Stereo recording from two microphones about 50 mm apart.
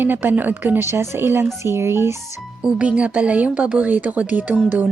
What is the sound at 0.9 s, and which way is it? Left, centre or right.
A woman's voice, right.